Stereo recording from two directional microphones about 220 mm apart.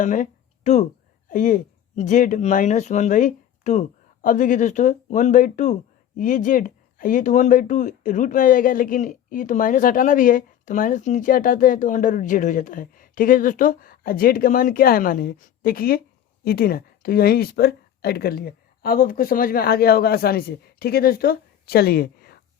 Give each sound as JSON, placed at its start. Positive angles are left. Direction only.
{"t": 0.0, "sound": "speech", "side_deg": 35}